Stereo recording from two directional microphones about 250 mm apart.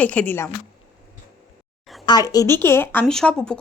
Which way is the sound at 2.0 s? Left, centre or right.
Centre.